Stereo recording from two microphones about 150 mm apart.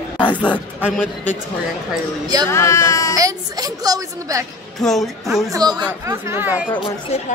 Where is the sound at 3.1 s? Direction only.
25° right (ahead or behind).